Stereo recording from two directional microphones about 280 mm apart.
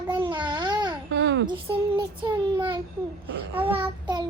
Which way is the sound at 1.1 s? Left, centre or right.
Right.